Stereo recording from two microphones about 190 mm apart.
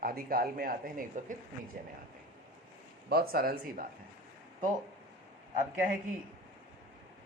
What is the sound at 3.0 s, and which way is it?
Speech, 55° right (ahead or behind).